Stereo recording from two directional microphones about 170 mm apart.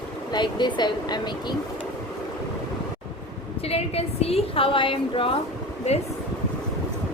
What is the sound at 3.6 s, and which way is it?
A woman's voice, 35° left (ahead or behind).